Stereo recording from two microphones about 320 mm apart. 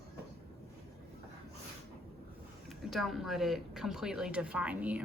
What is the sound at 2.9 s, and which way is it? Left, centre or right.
Speech, centre.